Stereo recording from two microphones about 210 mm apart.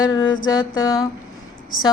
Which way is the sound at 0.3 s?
70° left (ahead or behind).